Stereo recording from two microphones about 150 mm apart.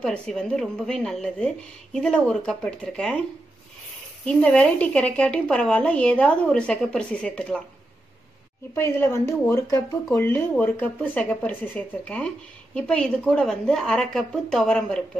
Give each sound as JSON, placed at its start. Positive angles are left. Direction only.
{"t": 0.0, "sound": "a woman's voice", "side_deg": 5}
{"t": 4.3, "sound": "speech", "side_deg": 5}
{"t": 8.7, "sound": "a woman's voice", "side_deg": 15}